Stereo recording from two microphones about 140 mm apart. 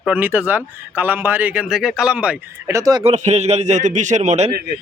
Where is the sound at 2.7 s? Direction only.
25° right (ahead or behind).